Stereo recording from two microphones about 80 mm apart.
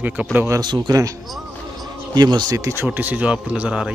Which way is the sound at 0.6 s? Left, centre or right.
Right.